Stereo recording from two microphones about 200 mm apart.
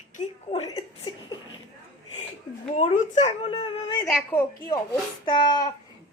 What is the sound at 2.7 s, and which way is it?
Speech, 30° left (ahead or behind).